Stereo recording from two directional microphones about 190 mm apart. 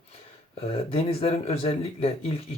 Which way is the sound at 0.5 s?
30° left (ahead or behind).